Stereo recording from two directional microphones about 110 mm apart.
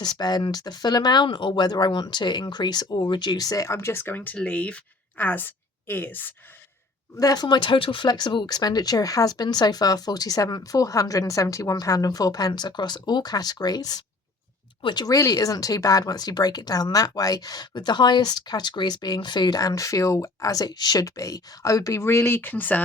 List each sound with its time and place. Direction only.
0.0 s speech: 40° left (ahead or behind); by 6.3 s 15° left (ahead or behind)
7.2 s speech: 35° left (ahead or behind); by 22.8 s 15° left (ahead or behind)